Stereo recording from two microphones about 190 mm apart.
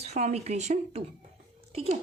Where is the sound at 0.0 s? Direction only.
35° right (ahead or behind).